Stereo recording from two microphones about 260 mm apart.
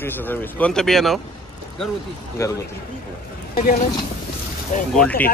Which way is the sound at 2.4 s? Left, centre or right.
Centre.